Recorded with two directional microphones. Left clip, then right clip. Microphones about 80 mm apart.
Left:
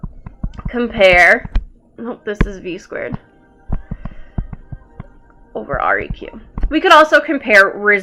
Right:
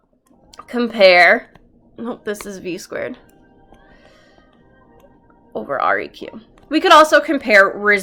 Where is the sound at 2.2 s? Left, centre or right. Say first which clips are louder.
Left 6 dB; centre.